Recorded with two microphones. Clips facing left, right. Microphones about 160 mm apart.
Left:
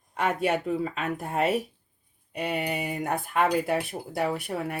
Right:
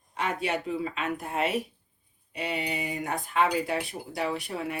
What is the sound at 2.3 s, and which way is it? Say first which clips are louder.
Speech: left 3 dB; 50° left (ahead or behind).